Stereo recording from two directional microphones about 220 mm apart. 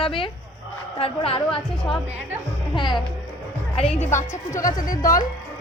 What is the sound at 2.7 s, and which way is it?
Speech, 20° left (ahead or behind).